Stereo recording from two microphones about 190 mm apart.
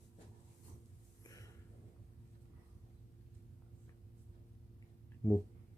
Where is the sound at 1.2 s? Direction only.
15° left (ahead or behind).